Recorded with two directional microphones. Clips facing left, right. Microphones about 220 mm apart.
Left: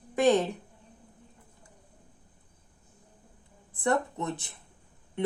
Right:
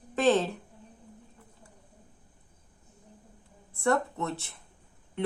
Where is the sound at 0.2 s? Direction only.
15° left (ahead or behind).